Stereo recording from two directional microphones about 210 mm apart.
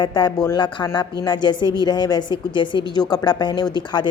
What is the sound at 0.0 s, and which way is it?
A woman's voice, 20° left (ahead or behind).